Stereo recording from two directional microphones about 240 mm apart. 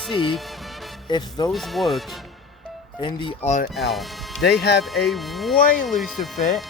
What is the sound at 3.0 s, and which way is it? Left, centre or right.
Speech, centre.